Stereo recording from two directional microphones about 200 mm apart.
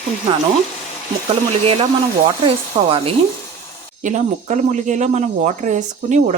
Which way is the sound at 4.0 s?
40° right (ahead or behind).